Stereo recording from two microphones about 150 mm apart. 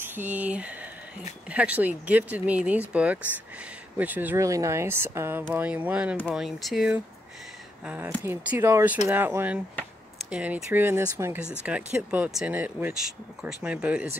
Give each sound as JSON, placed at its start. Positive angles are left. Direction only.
{"t": 0.0, "sound": "speech", "side_deg": -10}